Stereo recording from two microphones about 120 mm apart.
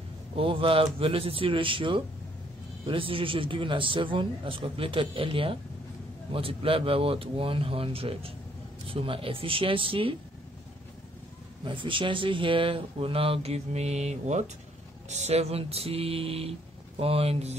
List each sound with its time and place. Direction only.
0.4 s speech: 50° right (ahead or behind)
11.6 s speech: 45° right (ahead or behind); by 14.4 s 70° right (ahead or behind)
15.0 s music: 65° right (ahead or behind)